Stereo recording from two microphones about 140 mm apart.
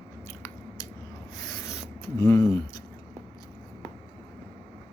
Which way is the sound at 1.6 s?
20° left (ahead or behind).